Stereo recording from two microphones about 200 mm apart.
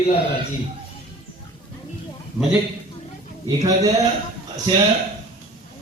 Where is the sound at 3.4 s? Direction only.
15° right (ahead or behind).